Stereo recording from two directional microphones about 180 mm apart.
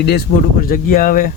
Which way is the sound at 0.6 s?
50° left (ahead or behind).